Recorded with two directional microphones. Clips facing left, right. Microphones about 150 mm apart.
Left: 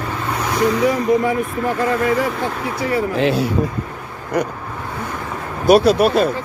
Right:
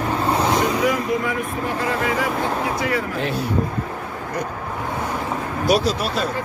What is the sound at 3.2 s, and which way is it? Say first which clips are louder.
Speech: left 7 dB; 90° left.